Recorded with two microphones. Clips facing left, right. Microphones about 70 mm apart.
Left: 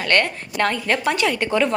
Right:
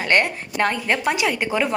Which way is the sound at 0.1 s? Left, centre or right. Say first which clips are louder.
Even; centre.